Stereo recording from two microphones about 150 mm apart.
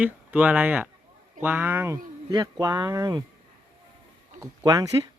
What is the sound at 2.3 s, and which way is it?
Speech, 25° right (ahead or behind).